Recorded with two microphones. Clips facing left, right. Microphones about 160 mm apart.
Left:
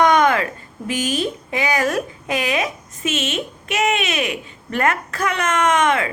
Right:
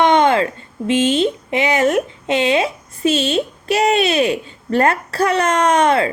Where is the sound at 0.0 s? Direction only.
25° right (ahead or behind).